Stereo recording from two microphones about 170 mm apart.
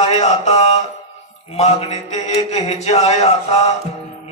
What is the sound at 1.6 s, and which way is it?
Mantra, 40° left (ahead or behind).